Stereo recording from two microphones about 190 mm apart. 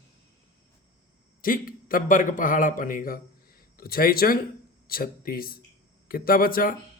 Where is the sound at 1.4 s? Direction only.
45° left (ahead or behind).